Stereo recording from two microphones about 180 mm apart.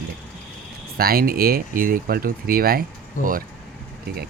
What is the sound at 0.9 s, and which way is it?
Speech, 55° right (ahead or behind).